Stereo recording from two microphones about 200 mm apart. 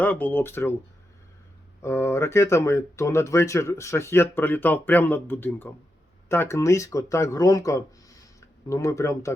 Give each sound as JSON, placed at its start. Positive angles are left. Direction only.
{"t": 0.0, "sound": "speech", "side_deg": 10}
{"t": 1.8, "sound": "speech", "side_deg": 15}